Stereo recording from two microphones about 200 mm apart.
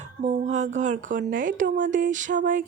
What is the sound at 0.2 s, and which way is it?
Speech, 35° right (ahead or behind).